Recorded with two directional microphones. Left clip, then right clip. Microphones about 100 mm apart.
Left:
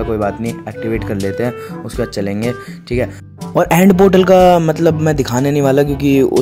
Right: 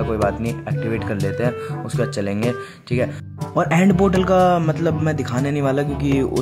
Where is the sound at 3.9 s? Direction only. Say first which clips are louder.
Left 10 dB; 55° left (ahead or behind).